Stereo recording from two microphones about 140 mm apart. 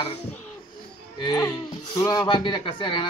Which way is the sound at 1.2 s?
30° left (ahead or behind).